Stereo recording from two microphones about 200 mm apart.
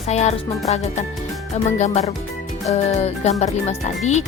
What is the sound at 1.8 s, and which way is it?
A child's voice, 30° left (ahead or behind).